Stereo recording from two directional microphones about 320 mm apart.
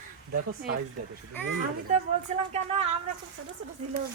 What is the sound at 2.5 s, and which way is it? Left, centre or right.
Speech, centre.